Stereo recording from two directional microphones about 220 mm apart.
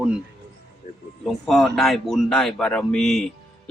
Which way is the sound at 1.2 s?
Centre (ahead or behind).